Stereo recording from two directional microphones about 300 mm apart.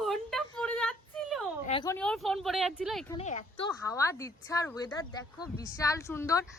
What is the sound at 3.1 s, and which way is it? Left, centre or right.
Speech, left.